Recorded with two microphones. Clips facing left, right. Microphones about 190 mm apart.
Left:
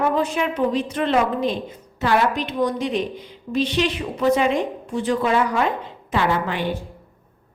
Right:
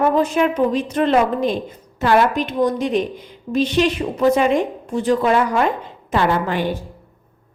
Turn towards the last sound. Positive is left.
turn(degrees=-45)  # may be behind; listen again after turning